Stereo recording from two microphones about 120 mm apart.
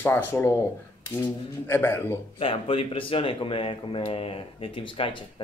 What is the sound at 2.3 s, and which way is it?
Speech, 50° left (ahead or behind).